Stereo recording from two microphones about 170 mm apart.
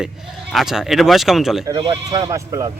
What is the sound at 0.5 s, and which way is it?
Speech, centre (ahead or behind).